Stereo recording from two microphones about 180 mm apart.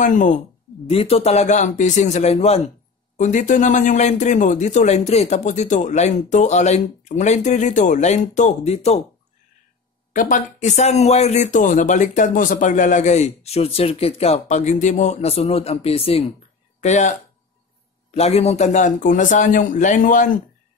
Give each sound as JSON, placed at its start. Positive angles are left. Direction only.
{"t": 0.0, "sound": "a man's voice", "side_deg": 45}
{"t": 0.8, "sound": "speech", "side_deg": 35}
{"t": 10.1, "sound": "speech", "side_deg": 45}
{"t": 18.1, "sound": "a man's voice", "side_deg": 35}